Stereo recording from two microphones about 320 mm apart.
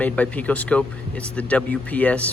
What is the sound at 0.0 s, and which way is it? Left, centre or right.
Speech, centre.